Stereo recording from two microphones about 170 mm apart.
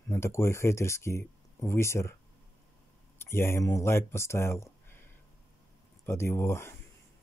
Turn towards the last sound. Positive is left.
turn(degrees=15)  # may be behind; listen again after turning